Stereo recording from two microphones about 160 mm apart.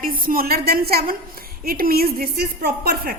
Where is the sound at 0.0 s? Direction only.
65° right (ahead or behind).